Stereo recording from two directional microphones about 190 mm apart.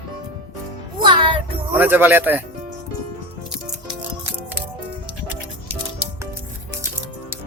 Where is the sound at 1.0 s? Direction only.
25° right (ahead or behind).